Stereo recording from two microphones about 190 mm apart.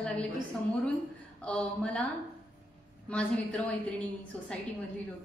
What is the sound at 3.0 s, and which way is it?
A woman's voice, 5° left (ahead or behind).